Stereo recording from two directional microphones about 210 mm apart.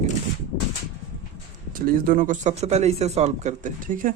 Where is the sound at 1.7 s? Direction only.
45° right (ahead or behind).